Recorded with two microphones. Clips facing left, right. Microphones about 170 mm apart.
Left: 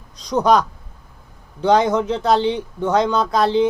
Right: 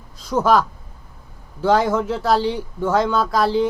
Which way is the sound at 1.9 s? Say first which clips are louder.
Left 1 dB; 20° left (ahead or behind).